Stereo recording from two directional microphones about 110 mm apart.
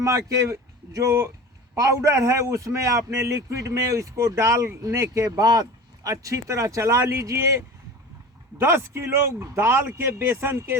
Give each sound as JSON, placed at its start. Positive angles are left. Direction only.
{"t": 0.0, "sound": "speech", "side_deg": -30}